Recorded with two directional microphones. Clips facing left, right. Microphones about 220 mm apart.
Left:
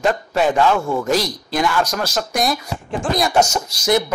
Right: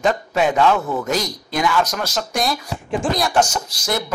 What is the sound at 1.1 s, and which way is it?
Speech, centre (ahead or behind).